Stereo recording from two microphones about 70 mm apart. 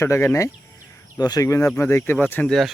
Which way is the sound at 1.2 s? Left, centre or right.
Left.